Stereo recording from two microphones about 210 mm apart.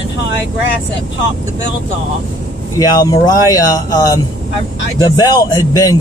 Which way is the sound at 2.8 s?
15° left (ahead or behind).